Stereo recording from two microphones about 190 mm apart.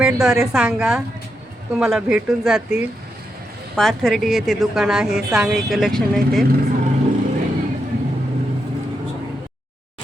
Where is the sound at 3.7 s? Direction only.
Centre (ahead or behind).